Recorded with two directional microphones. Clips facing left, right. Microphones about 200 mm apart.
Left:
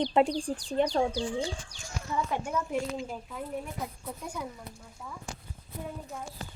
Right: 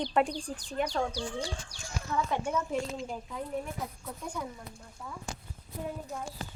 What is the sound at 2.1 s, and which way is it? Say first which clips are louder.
Speech: even; 10° left (ahead or behind).